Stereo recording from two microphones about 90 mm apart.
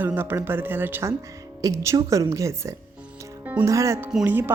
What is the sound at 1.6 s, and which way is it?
A woman's voice, 35° right (ahead or behind).